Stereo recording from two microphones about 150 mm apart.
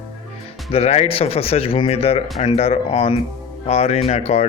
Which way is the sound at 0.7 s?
45° left (ahead or behind).